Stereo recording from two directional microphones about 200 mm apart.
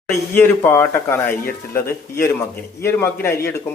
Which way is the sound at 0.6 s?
10° left (ahead or behind).